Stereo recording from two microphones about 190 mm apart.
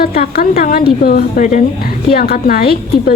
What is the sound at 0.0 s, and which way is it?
A woman's voice, 55° left (ahead or behind).